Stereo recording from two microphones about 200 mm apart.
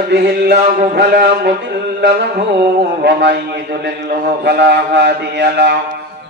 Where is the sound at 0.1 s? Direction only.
60° right (ahead or behind).